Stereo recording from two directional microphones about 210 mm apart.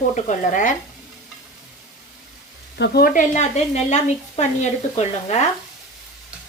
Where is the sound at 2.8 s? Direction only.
45° left (ahead or behind); by 5.4 s 30° left (ahead or behind).